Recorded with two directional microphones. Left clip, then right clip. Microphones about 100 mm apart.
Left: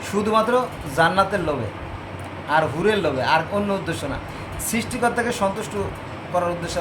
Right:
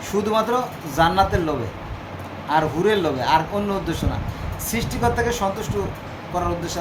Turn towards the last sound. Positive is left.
turn(degrees=20)  # may be behind; listen again after turning